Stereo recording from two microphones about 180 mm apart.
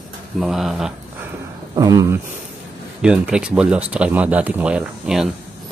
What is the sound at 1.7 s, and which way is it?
Speech, 20° right (ahead or behind).